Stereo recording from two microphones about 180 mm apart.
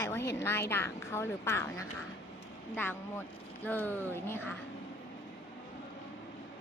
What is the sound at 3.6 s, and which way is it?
Speech, 10° left (ahead or behind).